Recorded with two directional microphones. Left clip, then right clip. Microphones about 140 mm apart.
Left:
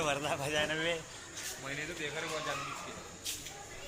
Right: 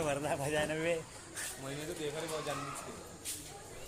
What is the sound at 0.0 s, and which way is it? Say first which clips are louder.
Speech: left 1 dB; 30° right (ahead or behind).